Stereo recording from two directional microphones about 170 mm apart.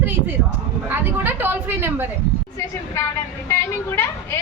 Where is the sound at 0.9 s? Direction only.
10° right (ahead or behind).